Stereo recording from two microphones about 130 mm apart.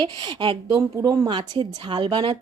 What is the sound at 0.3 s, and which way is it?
Speech, 40° right (ahead or behind).